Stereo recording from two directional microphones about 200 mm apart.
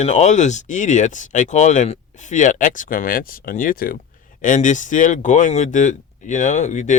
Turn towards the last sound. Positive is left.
turn(degrees=35)  # may be behind; listen again after turning